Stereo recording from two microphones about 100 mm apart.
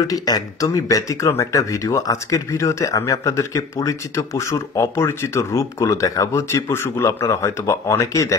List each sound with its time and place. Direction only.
0.0 s speech: 40° left (ahead or behind)